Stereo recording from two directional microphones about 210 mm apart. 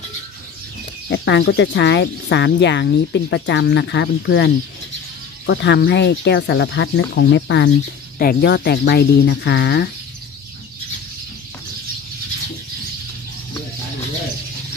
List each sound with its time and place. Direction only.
1.0 s speech: 55° left (ahead or behind)
5.5 s speech: 55° left (ahead or behind)
8.2 s speech: 45° left (ahead or behind)